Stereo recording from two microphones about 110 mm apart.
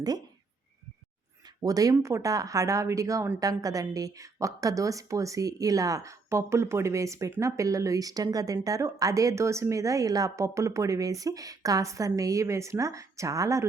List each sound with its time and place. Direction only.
1.6 s a woman's voice: 35° right (ahead or behind)